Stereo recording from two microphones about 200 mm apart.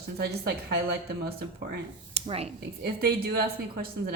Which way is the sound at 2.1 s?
30° right (ahead or behind).